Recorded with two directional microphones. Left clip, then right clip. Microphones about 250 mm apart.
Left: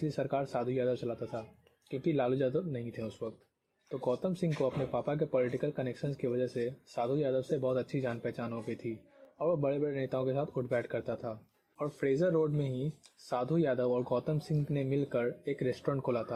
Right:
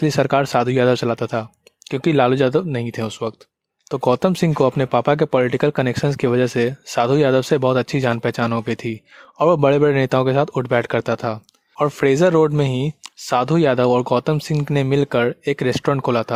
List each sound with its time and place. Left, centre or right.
0.0 s speech: right